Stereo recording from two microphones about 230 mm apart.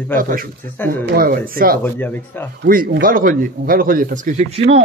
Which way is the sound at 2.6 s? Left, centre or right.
Right.